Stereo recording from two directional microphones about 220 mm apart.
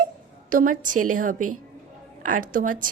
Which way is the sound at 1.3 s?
90° right.